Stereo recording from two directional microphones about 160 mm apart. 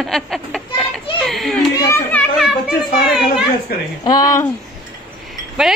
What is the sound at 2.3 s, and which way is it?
Speech, centre (ahead or behind).